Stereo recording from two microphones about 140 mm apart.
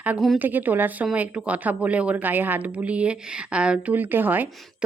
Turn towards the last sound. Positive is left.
turn(degrees=-10)  # may be behind; listen again after turning